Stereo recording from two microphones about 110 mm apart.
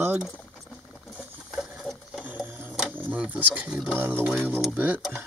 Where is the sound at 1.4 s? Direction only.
Centre (ahead or behind).